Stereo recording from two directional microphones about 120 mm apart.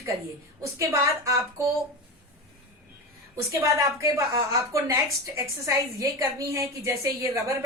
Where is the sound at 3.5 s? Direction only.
25° right (ahead or behind).